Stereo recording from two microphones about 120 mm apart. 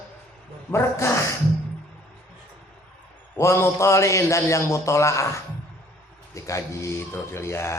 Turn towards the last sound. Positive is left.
turn(degrees=20)  # may be behind; listen again after turning